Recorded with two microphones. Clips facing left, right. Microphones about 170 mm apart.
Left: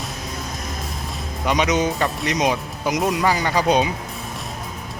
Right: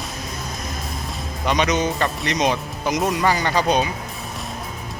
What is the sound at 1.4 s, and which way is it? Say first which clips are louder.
Speech: left 1 dB; 10° left (ahead or behind).